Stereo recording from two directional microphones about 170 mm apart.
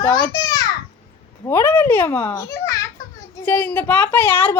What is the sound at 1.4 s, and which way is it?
Speech, 15° left (ahead or behind).